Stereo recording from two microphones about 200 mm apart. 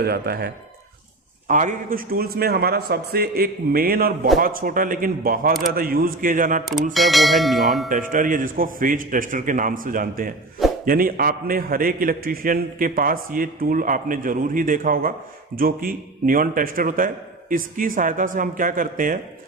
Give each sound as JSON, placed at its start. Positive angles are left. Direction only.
{"t": 0.0, "sound": "a man's voice", "side_deg": -50}
{"t": 1.5, "sound": "a man's voice", "side_deg": -40}
{"t": 6.9, "sound": "church bell", "side_deg": 0}
{"t": 7.9, "sound": "a man's voice", "side_deg": -40}